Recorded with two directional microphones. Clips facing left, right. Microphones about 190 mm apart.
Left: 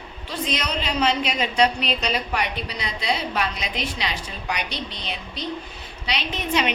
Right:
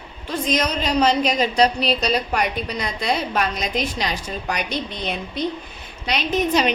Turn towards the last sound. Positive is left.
turn(degrees=-40)  # may be behind; listen again after turning